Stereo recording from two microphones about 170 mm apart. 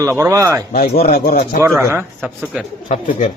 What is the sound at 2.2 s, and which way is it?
Speech, centre (ahead or behind).